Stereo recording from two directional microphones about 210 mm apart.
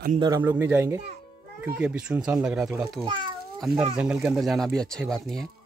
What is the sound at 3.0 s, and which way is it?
Speech, 20° right (ahead or behind).